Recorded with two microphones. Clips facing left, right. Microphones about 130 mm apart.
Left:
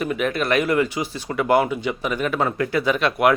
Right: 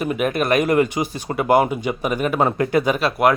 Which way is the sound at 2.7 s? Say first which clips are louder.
Right 2 dB; 45° right (ahead or behind).